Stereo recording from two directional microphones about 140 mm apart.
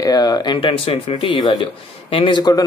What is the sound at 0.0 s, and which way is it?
Speech, 30° left (ahead or behind).